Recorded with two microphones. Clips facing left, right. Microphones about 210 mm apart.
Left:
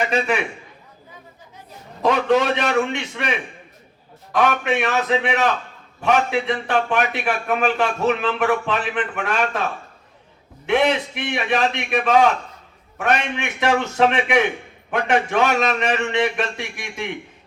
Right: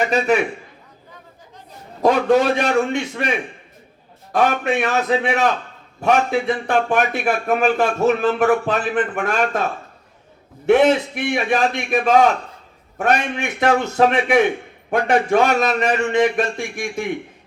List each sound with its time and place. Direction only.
2.0 s a man's voice: 40° right (ahead or behind)
10.7 s a man's voice: 45° right (ahead or behind)